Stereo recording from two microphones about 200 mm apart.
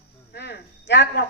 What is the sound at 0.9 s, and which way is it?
Speech, 60° left (ahead or behind).